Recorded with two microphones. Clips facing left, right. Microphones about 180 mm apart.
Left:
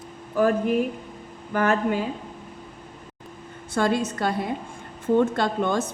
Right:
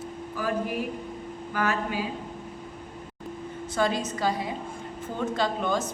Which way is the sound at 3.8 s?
60° left (ahead or behind).